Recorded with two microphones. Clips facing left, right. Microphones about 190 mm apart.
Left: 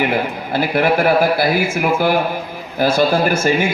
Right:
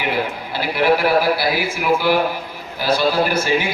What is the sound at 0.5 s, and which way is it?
A man's voice, 50° left (ahead or behind).